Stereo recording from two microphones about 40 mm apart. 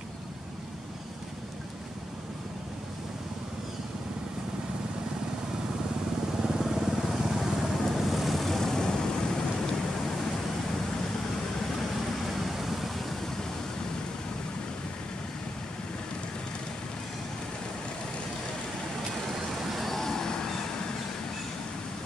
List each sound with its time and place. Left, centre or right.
6.4 s vehicle: centre
12.4 s vehicle: centre
19.6 s vehicle: centre